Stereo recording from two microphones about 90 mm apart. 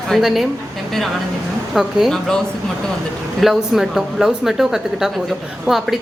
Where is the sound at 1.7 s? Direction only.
5° right (ahead or behind).